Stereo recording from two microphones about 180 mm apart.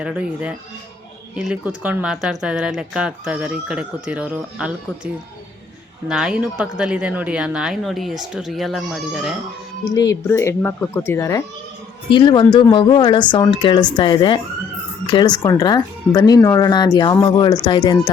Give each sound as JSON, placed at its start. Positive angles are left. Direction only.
{"t": 0.0, "sound": "speech", "side_deg": -5}
{"t": 6.1, "sound": "speech", "side_deg": -5}
{"t": 9.8, "sound": "speech", "side_deg": 20}
{"t": 12.1, "sound": "speech", "side_deg": 25}